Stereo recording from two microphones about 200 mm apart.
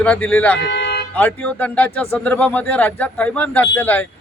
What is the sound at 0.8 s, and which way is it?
Vehicle, 55° left (ahead or behind).